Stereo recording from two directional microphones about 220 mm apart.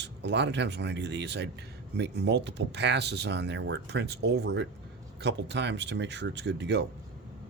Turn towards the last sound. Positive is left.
turn(degrees=-55)  # may be behind; listen again after turning